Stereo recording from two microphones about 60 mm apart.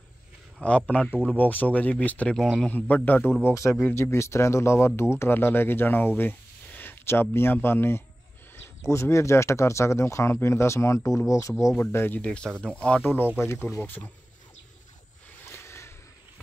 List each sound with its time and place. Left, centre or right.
0.6 s a man's voice: left
3.9 s a man's voice: left
8.8 s speech: left
11.8 s a man's voice: left
12.2 s speech: centre
13.0 s a man's voice: left
13.5 s speech: left
13.7 s a man's voice: left
15.4 s a sound: left